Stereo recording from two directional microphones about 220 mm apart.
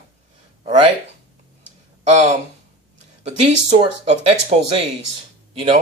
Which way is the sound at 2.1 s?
30° right (ahead or behind).